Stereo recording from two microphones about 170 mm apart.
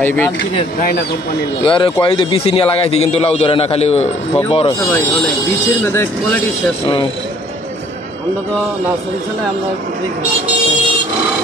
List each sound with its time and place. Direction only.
0.0 s speech: 10° left (ahead or behind)
1.6 s speech: 30° left (ahead or behind)
5.9 s speech: 15° left (ahead or behind)